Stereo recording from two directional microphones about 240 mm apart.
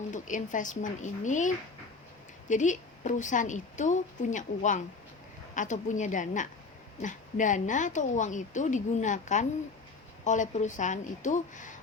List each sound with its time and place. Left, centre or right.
0.1 s a woman's voice: left